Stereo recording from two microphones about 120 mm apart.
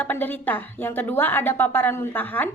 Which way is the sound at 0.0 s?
15° left (ahead or behind).